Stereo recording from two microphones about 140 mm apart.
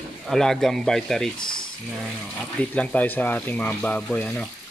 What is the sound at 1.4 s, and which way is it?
Boiling, 35° left (ahead or behind).